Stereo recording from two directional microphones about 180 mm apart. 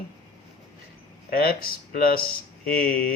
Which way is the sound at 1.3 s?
55° left (ahead or behind).